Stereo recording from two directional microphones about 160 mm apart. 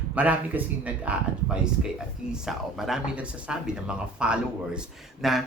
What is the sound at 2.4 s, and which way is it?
Speech, centre (ahead or behind).